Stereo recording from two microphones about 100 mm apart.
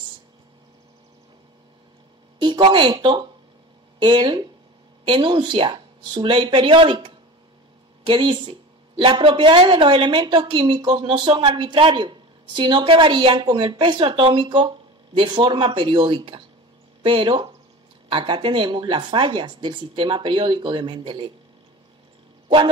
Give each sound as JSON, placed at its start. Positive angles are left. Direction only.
{"t": 2.4, "sound": "speech", "side_deg": -50}